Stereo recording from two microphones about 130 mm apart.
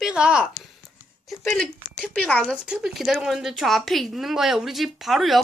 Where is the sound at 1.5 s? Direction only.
5° left (ahead or behind).